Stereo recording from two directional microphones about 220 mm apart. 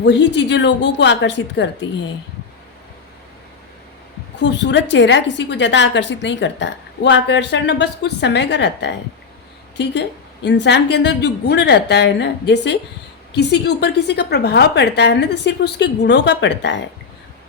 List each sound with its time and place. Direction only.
0.0 s a woman's voice: 55° left (ahead or behind)
4.4 s a woman's voice: 55° left (ahead or behind)